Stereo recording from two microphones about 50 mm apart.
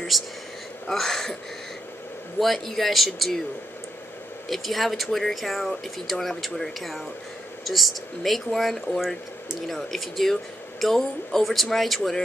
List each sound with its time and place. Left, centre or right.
0.8 s speech: centre
2.4 s speech: centre
4.5 s speech: centre